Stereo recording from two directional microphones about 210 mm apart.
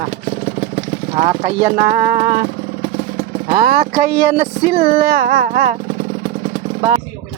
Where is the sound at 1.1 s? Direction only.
35° right (ahead or behind).